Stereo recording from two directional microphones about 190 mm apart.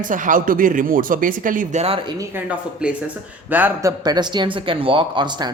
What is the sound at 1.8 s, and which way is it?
Speech, 25° right (ahead or behind).